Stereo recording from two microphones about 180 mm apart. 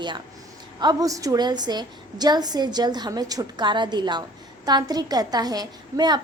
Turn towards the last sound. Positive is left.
turn(degrees=-25)  # may be behind; listen again after turning